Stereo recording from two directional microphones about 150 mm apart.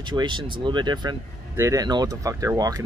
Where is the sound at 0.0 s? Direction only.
30° right (ahead or behind).